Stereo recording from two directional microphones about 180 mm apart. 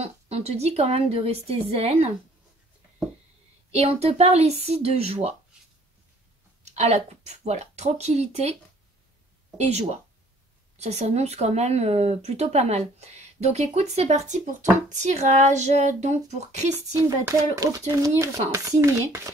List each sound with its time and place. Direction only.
0.0 s speech: 35° right (ahead or behind)
3.7 s speech: 35° right (ahead or behind)
6.6 s speech: 40° right (ahead or behind)
9.6 s speech: 40° right (ahead or behind)
16.7 s speech: 15° right (ahead or behind)